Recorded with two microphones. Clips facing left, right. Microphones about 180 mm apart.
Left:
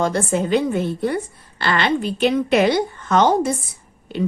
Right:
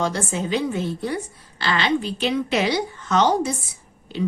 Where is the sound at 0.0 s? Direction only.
55° left (ahead or behind).